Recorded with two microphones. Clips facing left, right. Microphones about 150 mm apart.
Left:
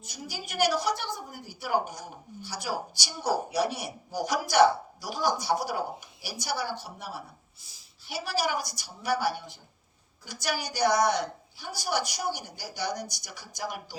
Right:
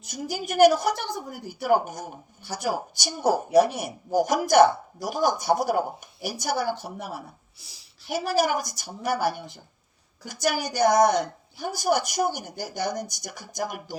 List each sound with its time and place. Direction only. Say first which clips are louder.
0.1 s a woman's voice: right 9 dB; 50° right (ahead or behind)
7.6 s a sound: right 5 dB; 75° right (ahead or behind)
8.1 s a woman's voice: right 6 dB; 50° right (ahead or behind)